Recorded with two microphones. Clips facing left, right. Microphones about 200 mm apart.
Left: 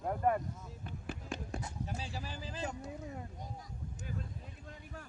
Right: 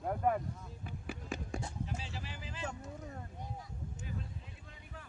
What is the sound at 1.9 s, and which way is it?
Speech, 40° left (ahead or behind).